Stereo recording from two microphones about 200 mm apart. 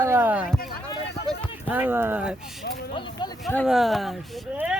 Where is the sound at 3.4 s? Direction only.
10° left (ahead or behind).